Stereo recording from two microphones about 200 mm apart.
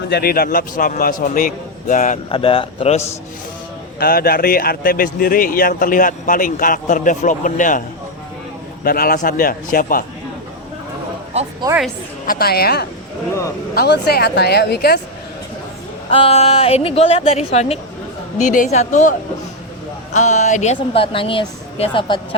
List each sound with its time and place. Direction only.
0.1 s speech: 50° left (ahead or behind)
2.3 s speech: 25° left (ahead or behind)
4.0 s speech: 50° left (ahead or behind)
8.8 s speech: 45° left (ahead or behind)
12.2 s speech: 45° left (ahead or behind)
16.0 s a woman's voice: 30° left (ahead or behind)
20.1 s speech: 35° left (ahead or behind)